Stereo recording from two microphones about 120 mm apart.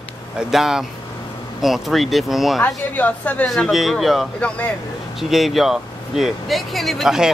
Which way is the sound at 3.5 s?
Centre (ahead or behind).